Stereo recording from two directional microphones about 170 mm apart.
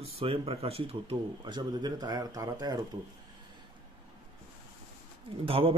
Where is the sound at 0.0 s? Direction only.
35° right (ahead or behind).